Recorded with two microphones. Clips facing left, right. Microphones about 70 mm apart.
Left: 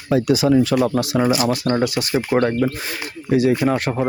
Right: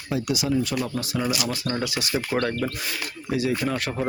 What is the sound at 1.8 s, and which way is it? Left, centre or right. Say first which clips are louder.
Speech: left 7 dB; left.